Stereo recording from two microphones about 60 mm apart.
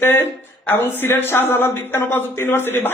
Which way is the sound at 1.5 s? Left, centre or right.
Left.